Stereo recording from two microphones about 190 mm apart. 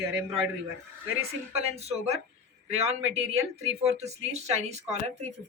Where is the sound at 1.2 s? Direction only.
35° right (ahead or behind).